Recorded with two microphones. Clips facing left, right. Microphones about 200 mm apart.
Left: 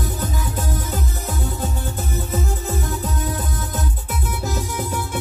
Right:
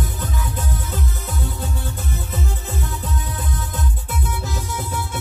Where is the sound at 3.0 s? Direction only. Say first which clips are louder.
Left 4 dB; 45° left (ahead or behind).